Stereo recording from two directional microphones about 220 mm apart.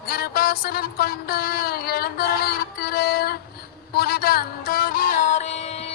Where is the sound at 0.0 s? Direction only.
45° left (ahead or behind).